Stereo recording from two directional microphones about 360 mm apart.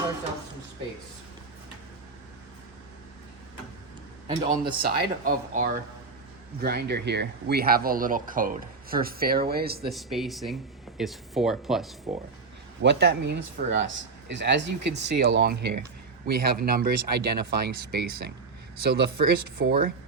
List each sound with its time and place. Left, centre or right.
4.3 s speech: centre
4.8 s speech: right
9.9 s speech: centre
12.8 s speech: right